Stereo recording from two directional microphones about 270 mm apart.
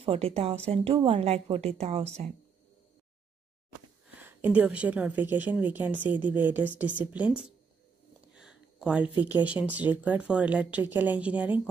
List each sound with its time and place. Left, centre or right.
0.0 s a woman's voice: right
4.2 s a woman's voice: centre
8.3 s a sound: centre
9.1 s speech: centre